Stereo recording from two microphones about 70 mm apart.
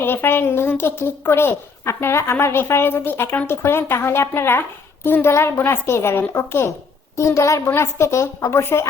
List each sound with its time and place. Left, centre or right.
0.0 s a woman's voice: left